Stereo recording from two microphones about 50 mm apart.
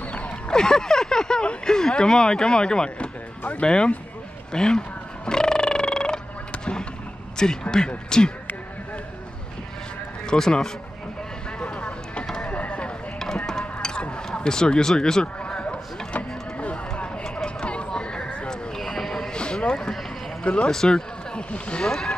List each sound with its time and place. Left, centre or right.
0.5 s speech: centre
4.5 s a sound: centre
7.3 s speech: centre
10.2 s speech: centre
11.6 s a sound: left
13.5 s music: centre
14.0 s a sound: centre
20.6 s speech: centre
21.8 s speech: centre